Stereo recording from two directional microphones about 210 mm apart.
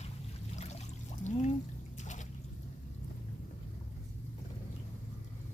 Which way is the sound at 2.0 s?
35° left (ahead or behind).